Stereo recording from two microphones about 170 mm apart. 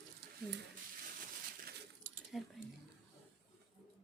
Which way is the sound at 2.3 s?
Centre (ahead or behind).